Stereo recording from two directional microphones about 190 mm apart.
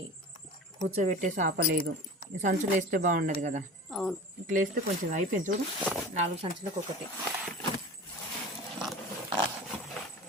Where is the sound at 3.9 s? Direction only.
Centre (ahead or behind).